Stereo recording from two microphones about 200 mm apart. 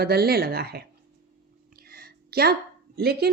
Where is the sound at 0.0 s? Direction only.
50° right (ahead or behind).